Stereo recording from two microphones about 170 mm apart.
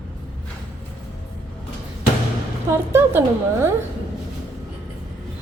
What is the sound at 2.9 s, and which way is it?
Speech, 15° right (ahead or behind).